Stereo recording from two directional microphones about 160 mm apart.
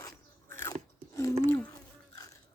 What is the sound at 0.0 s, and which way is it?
Biting, 15° left (ahead or behind).